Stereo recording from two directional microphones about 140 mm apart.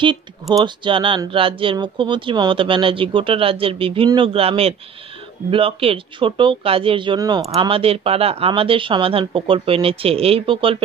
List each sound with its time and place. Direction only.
0.0 s speech: 30° right (ahead or behind)
7.5 s speech: 40° right (ahead or behind)